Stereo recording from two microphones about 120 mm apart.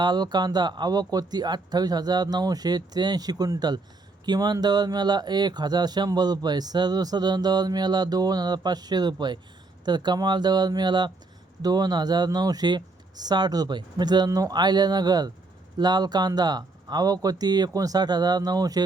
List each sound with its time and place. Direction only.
0.0 s speech: 35° right (ahead or behind)